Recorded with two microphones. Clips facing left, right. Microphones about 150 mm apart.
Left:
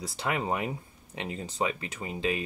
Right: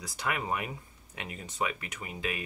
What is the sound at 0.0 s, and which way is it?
Speech, 25° left (ahead or behind).